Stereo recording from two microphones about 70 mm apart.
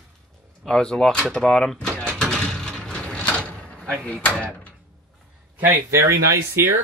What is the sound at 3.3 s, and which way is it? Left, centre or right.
Vehicle, centre.